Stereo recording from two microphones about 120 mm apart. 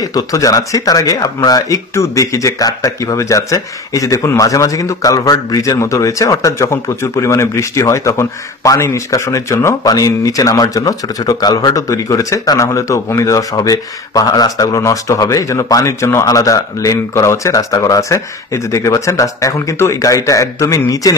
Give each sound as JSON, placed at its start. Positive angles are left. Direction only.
{"t": 0.0, "sound": "speech", "side_deg": 30}